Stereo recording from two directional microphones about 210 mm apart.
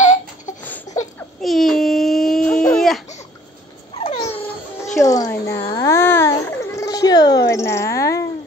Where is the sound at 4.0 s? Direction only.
30° left (ahead or behind).